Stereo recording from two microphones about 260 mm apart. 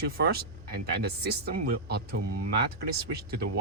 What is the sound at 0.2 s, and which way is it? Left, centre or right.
Speech, right.